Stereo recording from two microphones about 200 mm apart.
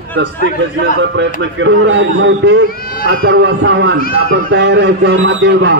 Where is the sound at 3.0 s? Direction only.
55° right (ahead or behind).